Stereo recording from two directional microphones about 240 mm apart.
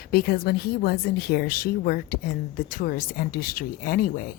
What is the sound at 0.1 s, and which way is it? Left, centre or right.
A woman's voice, left.